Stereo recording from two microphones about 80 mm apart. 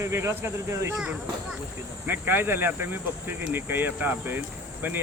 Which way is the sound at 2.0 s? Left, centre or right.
Right.